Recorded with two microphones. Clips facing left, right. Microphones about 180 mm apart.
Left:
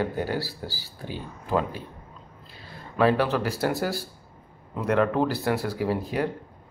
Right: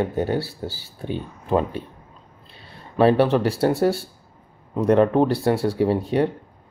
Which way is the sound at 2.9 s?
30° right (ahead or behind).